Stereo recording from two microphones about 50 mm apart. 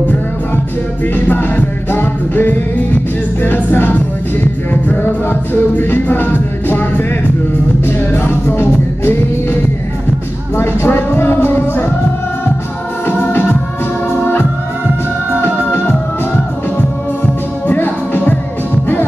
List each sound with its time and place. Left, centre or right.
1.1 s music: left
13.0 s music: left
17.7 s music: left